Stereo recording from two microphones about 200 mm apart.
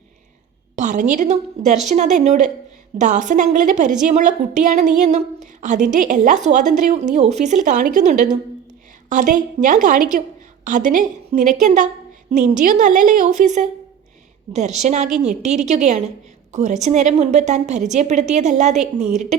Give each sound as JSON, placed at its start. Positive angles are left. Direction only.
{"t": 0.8, "sound": "a woman's voice", "side_deg": -40}
{"t": 19.0, "sound": "a woman's voice", "side_deg": 0}